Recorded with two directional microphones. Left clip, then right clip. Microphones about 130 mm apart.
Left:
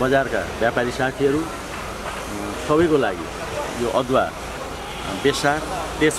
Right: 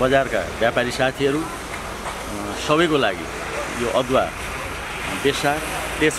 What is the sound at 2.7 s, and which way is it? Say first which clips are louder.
Speech: even; 35° right (ahead or behind).